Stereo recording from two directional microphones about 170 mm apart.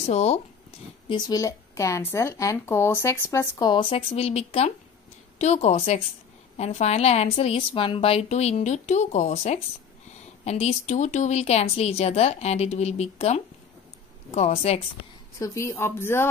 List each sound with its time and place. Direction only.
0.1 s a woman's voice: 40° left (ahead or behind)
1.0 s a woman's voice: 25° left (ahead or behind)
15.3 s speech: 15° left (ahead or behind)